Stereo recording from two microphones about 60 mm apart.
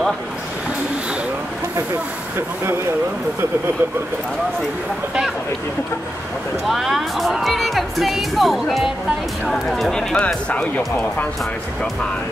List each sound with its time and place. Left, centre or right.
6.7 s speech: centre
10.2 s speech: left